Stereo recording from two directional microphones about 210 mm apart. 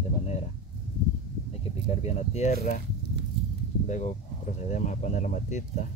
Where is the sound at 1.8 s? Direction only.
30° left (ahead or behind).